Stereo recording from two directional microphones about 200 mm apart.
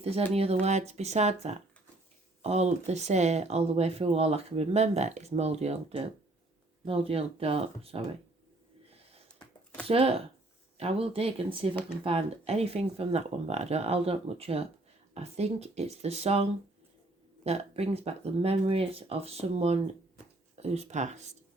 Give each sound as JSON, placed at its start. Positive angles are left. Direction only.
{"t": 0.6, "sound": "speech", "side_deg": -35}
{"t": 9.8, "sound": "speech", "side_deg": -30}